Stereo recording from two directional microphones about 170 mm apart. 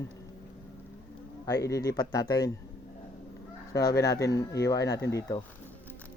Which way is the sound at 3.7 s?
20° left (ahead or behind).